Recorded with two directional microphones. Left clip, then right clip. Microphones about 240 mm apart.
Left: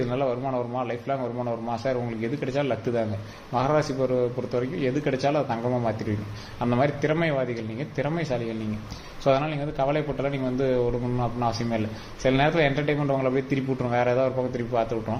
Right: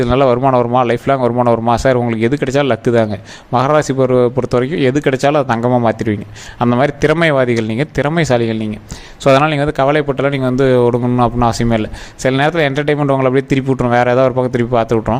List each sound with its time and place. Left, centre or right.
0.0 s speech: right